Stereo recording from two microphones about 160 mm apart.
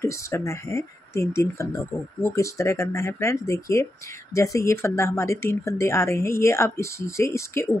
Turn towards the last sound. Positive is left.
turn(degrees=15)  # may be behind; listen again after turning